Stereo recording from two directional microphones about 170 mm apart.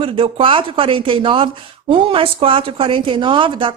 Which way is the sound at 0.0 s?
30° right (ahead or behind).